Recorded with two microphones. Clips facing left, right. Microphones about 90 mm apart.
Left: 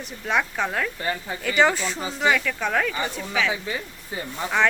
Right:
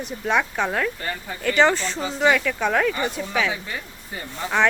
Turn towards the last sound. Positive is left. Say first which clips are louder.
# right 1 dB
turn(degrees=0)  # may be behind; listen again after turning